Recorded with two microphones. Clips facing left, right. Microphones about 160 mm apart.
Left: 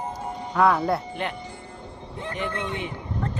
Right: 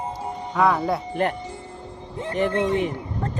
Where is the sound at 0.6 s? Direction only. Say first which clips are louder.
Even; centre (ahead or behind).